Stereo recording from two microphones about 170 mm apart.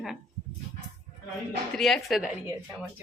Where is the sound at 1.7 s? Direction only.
Centre (ahead or behind).